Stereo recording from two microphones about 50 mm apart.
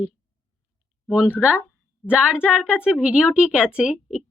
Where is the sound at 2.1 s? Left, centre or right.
Right.